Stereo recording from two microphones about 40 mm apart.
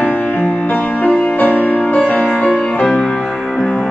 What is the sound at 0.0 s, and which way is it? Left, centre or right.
Music, left.